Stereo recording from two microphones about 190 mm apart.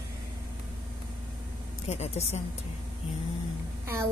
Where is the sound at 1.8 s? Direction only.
35° left (ahead or behind).